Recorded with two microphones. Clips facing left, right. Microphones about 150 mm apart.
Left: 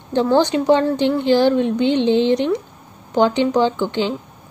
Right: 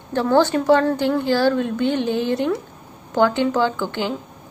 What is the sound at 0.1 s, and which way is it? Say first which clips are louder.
Speech: left 1 dB; 20° left (ahead or behind).